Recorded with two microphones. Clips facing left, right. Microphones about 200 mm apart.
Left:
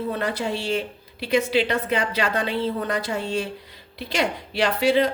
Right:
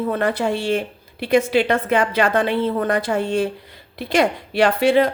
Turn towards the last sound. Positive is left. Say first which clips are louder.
# right 4 dB
turn(degrees=-55)  # may be behind; listen again after turning